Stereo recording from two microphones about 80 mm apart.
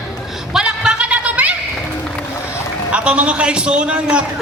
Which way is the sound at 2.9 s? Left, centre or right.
Centre.